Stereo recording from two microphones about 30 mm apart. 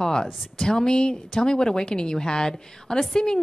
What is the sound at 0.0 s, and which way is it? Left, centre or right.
A woman's voice, left.